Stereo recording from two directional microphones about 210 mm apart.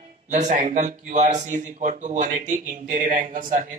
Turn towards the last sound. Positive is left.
turn(degrees=-40)  # may be behind; listen again after turning